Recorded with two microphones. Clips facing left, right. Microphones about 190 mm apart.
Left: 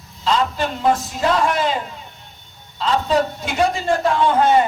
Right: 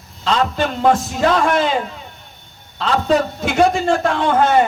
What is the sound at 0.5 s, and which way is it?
A man's voice, 50° right (ahead or behind).